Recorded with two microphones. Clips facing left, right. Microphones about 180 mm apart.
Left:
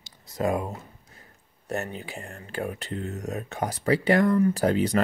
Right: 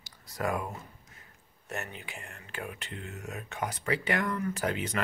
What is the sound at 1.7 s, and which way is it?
Speech, 35° left (ahead or behind).